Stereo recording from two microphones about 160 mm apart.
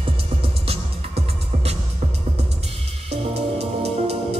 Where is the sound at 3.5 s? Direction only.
40° right (ahead or behind).